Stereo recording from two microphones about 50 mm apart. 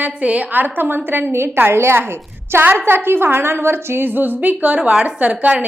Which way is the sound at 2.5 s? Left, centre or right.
Right.